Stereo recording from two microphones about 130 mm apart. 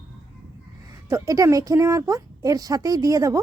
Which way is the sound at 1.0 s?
25° right (ahead or behind).